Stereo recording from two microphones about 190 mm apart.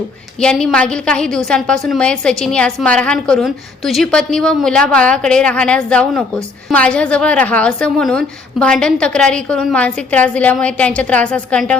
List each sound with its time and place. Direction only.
0.3 s a woman's voice: 5° left (ahead or behind)